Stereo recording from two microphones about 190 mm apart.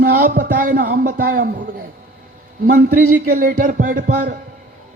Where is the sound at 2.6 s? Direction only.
50° right (ahead or behind).